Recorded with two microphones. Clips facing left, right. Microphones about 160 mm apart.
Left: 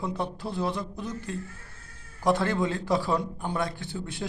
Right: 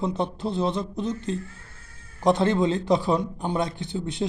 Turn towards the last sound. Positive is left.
turn(degrees=-20)  # may be behind; listen again after turning